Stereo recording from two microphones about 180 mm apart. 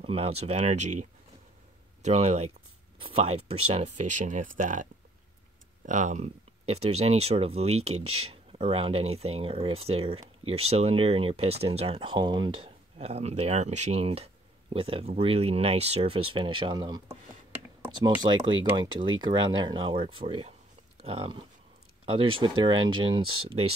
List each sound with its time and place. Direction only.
0.0 s speech: 35° right (ahead or behind)
2.0 s speech: 35° right (ahead or behind)
5.9 s speech: 45° right (ahead or behind); by 17.2 s 20° right (ahead or behind)
18.2 s speech: 25° right (ahead or behind)